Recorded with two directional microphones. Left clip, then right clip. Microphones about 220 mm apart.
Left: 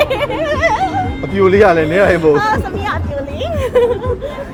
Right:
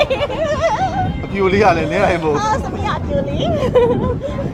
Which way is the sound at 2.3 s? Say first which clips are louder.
Left 4 dB; 35° right (ahead or behind).